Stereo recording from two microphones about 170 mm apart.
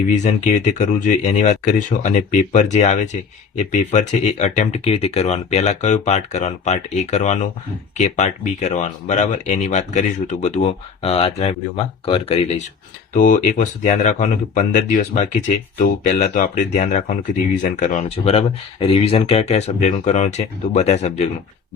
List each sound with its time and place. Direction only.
0.1 s speech: 45° left (ahead or behind)
13.1 s speech: 50° left (ahead or behind)